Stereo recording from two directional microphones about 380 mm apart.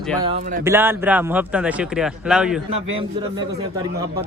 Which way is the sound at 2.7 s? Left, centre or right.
Centre.